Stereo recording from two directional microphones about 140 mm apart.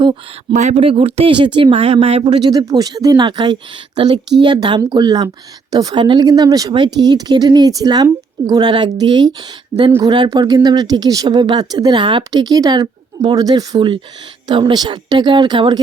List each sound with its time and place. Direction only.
0.5 s speech: 60° right (ahead or behind)
0.8 s speech: 40° right (ahead or behind)